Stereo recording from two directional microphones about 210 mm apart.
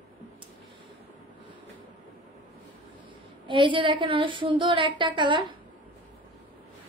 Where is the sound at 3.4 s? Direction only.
25° right (ahead or behind).